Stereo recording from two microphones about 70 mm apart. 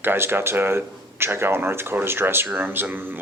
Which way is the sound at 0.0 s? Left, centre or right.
Right.